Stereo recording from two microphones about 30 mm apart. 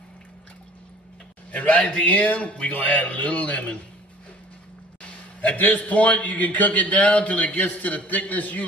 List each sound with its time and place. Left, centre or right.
1.5 s a man's voice: left
3.1 s a man's voice: left
5.6 s a man's voice: left